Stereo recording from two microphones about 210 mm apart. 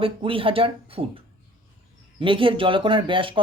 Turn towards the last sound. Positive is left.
turn(degrees=-25)  # may be behind; listen again after turning